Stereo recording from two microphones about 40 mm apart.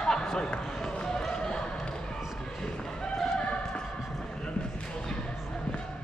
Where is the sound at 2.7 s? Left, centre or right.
Left.